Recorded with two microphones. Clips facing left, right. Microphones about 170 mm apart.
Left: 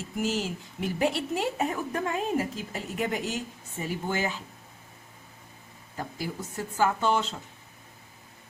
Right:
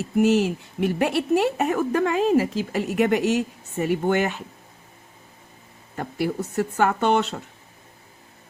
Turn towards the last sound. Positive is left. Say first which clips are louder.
# right 6 dB
turn(degrees=-70)  # may be behind; listen again after turning